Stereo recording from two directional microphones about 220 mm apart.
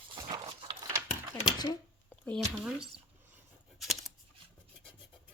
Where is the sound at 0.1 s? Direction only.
20° right (ahead or behind).